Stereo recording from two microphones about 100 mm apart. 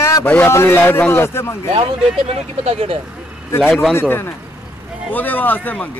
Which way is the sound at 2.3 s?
80° right.